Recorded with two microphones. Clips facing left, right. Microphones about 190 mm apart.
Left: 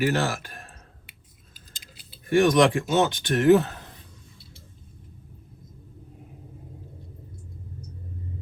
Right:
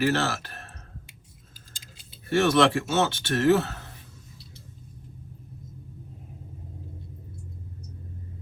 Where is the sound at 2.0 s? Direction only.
15° left (ahead or behind).